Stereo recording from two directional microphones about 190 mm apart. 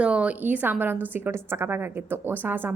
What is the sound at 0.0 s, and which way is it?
A woman's voice, 5° right (ahead or behind).